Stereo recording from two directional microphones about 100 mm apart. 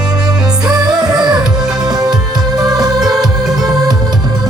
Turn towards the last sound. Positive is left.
turn(degrees=-40)  # may be behind; listen again after turning